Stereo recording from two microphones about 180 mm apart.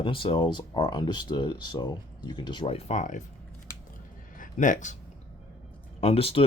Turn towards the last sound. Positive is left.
turn(degrees=30)  # may be behind; listen again after turning